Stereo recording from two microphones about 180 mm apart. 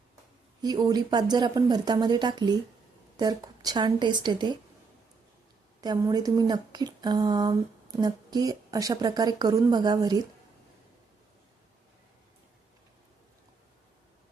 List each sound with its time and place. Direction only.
0.6 s speech: 20° right (ahead or behind)
5.8 s speech: 20° right (ahead or behind)